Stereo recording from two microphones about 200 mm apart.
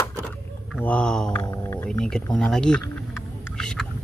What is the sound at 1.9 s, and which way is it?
Speech, 5° left (ahead or behind).